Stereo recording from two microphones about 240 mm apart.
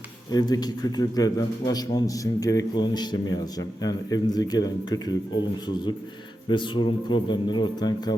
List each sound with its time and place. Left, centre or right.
0.3 s a man's voice: centre